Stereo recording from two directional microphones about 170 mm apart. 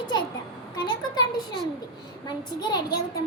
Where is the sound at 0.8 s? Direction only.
25° left (ahead or behind).